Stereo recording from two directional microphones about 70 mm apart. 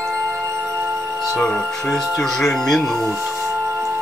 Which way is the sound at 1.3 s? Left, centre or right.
Centre.